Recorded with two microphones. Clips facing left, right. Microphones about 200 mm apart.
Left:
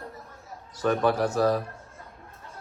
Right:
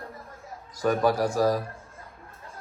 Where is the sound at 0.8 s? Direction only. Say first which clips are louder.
Even; 10° right (ahead or behind).